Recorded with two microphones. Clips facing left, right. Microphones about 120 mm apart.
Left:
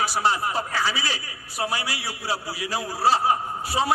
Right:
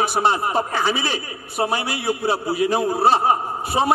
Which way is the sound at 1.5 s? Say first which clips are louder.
Right 6 dB; 55° right (ahead or behind).